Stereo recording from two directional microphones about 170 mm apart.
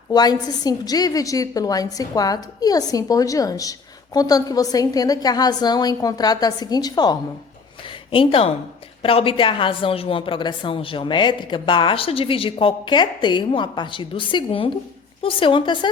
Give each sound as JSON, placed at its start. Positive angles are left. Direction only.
{"t": 0.1, "sound": "a woman's voice", "side_deg": 25}